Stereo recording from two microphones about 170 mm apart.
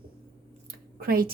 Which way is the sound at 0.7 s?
60° right (ahead or behind).